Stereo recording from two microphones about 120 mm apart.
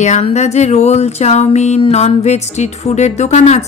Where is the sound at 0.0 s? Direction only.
70° left (ahead or behind).